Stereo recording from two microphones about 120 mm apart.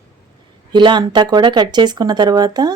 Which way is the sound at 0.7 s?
40° right (ahead or behind).